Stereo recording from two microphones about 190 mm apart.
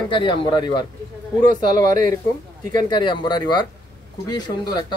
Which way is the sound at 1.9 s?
45° right (ahead or behind).